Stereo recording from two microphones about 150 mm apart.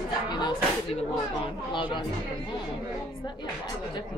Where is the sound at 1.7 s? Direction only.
35° left (ahead or behind).